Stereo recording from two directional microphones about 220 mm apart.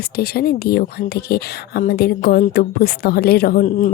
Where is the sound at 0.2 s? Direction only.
45° left (ahead or behind).